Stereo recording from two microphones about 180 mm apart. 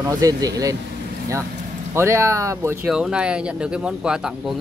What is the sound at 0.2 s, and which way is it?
Speech, 20° right (ahead or behind).